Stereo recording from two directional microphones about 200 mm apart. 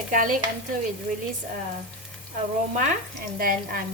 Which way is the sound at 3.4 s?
45° right (ahead or behind).